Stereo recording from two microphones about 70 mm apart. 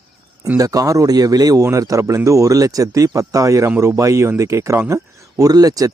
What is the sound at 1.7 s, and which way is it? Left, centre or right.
Speech, right.